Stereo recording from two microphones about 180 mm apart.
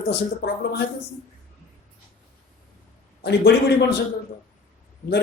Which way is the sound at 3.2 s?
70° left (ahead or behind).